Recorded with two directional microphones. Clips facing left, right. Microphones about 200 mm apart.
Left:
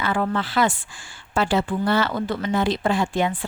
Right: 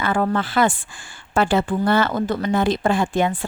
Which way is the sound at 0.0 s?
50° right (ahead or behind).